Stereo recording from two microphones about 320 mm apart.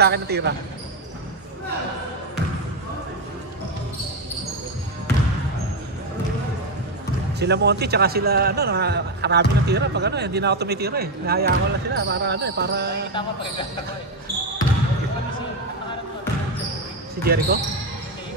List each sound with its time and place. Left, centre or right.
0.0 s a man's voice: right
7.3 s a man's voice: right
17.2 s speech: right